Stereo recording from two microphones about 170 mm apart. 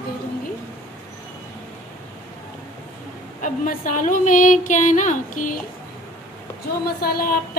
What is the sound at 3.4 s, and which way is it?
A woman's voice, 50° left (ahead or behind).